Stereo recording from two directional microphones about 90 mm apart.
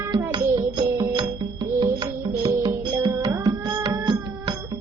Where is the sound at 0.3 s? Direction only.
55° right (ahead or behind).